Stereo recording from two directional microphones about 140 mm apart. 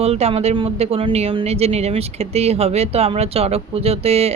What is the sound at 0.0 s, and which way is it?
Speech, 45° right (ahead or behind).